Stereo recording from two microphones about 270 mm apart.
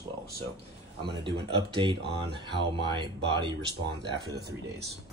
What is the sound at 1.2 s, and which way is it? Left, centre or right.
Speech, centre.